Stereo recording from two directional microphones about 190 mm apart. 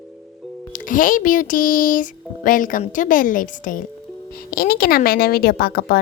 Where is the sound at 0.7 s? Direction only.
45° left (ahead or behind).